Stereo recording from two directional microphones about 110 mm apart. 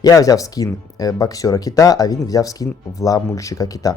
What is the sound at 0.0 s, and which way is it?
Speech, 30° left (ahead or behind).